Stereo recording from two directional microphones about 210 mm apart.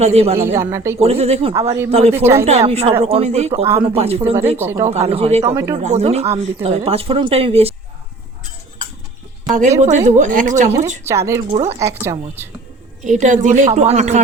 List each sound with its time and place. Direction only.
0.0 s speech: 30° right (ahead or behind)
0.3 s speech: 15° right (ahead or behind)
0.9 s speech: 30° right (ahead or behind)
2.1 s speech: 10° right (ahead or behind)
2.5 s speech: 30° right (ahead or behind)
4.5 s speech: 10° right (ahead or behind)
4.9 s speech: 30° right (ahead or behind)
5.5 s speech: 15° right (ahead or behind)
5.7 s speech: 30° right (ahead or behind)
9.5 s a woman's voice: 35° right (ahead or behind)
11.0 s speech: 15° right (ahead or behind)
11.4 s speech: 25° right (ahead or behind)
11.8 s speech: 15° right (ahead or behind)
13.1 s a woman's voice: 35° right (ahead or behind)